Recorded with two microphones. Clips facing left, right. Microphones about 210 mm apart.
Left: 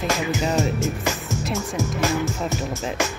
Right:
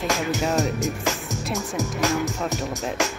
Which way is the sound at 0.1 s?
Centre (ahead or behind).